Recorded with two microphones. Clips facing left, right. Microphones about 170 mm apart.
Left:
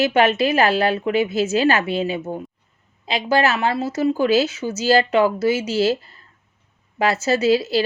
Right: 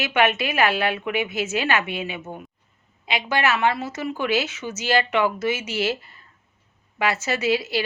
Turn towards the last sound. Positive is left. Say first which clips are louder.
# left 6 dB
turn(degrees=35)  # may be behind; listen again after turning